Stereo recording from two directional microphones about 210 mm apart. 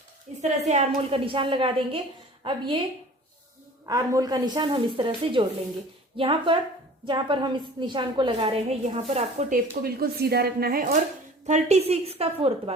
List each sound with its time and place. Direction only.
0.3 s a sound: 30° right (ahead or behind)
0.6 s a woman's voice: 30° right (ahead or behind)
3.8 s a woman's voice: 15° right (ahead or behind)
9.8 s a woman's voice: 45° right (ahead or behind)
11.4 s a woman's voice: 30° right (ahead or behind)